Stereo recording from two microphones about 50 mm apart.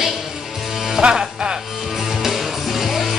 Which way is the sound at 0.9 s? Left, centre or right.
Centre.